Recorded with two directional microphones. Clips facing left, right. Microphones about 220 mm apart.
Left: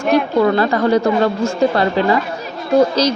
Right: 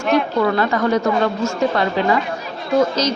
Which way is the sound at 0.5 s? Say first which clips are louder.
Left 3 dB; 35° left (ahead or behind).